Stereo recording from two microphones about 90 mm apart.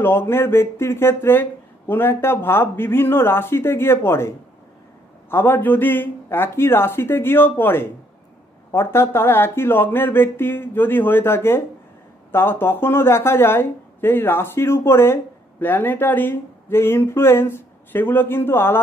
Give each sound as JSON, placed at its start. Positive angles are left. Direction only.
{"t": 0.0, "sound": "speech", "side_deg": 25}
{"t": 5.3, "sound": "speech", "side_deg": 20}